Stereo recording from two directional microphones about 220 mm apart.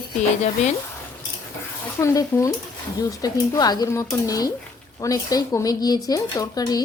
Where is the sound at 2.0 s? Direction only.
15° left (ahead or behind).